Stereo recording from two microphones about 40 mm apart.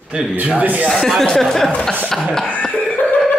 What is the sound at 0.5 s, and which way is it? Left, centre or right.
Speech, right.